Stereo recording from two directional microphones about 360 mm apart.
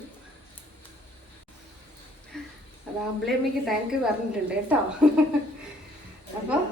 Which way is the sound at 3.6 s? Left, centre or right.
Centre.